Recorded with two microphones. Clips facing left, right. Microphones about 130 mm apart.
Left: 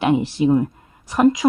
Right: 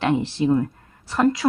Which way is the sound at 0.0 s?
15° left (ahead or behind).